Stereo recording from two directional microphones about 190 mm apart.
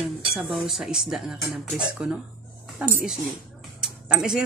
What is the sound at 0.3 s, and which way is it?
Speech, centre (ahead or behind).